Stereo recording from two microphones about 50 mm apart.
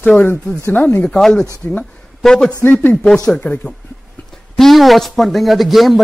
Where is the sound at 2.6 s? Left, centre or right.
Left.